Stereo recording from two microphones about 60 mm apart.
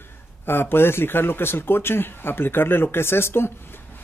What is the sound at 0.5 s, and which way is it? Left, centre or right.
Speech, left.